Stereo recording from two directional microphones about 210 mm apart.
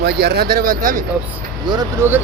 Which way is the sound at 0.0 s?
50° right (ahead or behind).